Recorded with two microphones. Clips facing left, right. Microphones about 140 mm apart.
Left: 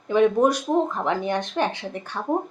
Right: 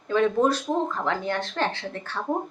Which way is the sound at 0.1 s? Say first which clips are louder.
Left 3 dB; 15° left (ahead or behind).